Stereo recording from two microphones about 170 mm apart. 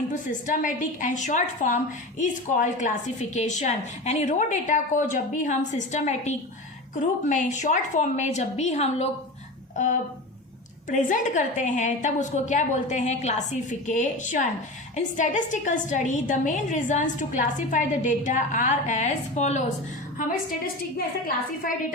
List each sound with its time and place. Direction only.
0.1 s a woman's voice: 50° left (ahead or behind)